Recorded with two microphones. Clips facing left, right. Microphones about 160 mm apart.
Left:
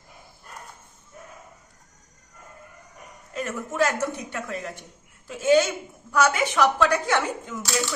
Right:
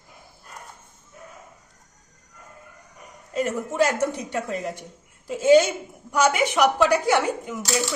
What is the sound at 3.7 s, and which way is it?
A woman's voice, 25° right (ahead or behind).